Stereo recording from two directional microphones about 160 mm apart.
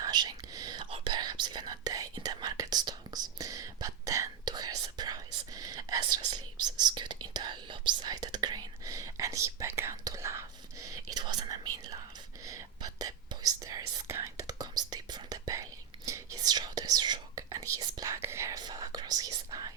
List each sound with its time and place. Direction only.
0.0 s whispering: 25° right (ahead or behind)
6.0 s speech: 30° right (ahead or behind)
12.5 s whispering: 20° right (ahead or behind)